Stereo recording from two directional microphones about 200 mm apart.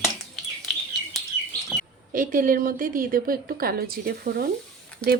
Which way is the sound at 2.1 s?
45° right (ahead or behind).